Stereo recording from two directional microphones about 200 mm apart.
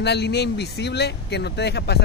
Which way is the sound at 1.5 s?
55° left (ahead or behind).